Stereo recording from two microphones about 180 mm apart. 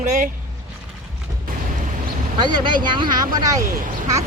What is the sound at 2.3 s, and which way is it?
Speech, 25° right (ahead or behind).